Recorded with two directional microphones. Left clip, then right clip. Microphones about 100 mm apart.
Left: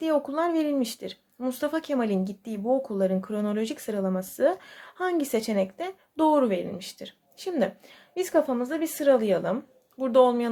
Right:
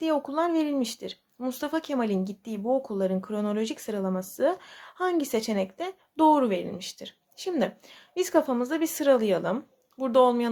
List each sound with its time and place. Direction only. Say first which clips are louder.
0.0 s a woman's voice: left 1 dB; 15° right (ahead or behind)